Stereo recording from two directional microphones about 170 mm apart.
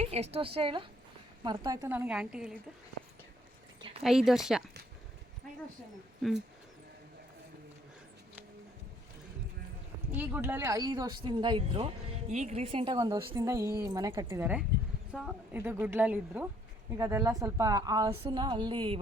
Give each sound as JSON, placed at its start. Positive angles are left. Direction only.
{"t": 0.0, "sound": "a woman's voice", "side_deg": -40}
{"t": 4.0, "sound": "speech", "side_deg": 0}
{"t": 6.2, "sound": "speech", "side_deg": 0}
{"t": 10.1, "sound": "a woman's voice", "side_deg": -10}
{"t": 12.3, "sound": "a woman's voice", "side_deg": -40}
{"t": 15.1, "sound": "speech", "side_deg": 0}
{"t": 15.5, "sound": "a woman's voice", "side_deg": -15}